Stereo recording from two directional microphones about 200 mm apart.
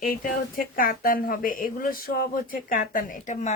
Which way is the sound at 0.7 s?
45° left (ahead or behind).